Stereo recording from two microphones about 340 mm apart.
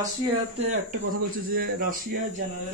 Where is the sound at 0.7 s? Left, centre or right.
Right.